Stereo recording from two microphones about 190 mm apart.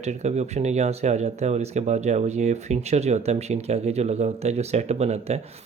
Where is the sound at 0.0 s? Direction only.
35° right (ahead or behind).